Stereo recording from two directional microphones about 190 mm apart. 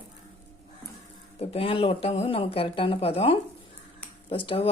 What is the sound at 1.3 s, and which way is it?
Speech, 30° left (ahead or behind).